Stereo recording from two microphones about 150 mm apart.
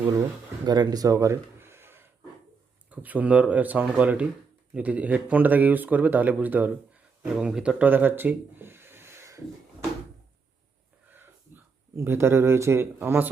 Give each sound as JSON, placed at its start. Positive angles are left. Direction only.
{"t": 0.0, "sound": "speech", "side_deg": -20}
{"t": 11.1, "sound": "speech", "side_deg": -15}